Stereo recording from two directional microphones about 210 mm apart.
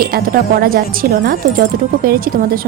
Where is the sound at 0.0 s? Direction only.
45° right (ahead or behind).